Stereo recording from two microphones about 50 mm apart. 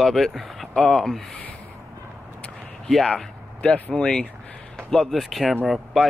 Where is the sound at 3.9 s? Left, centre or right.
Centre.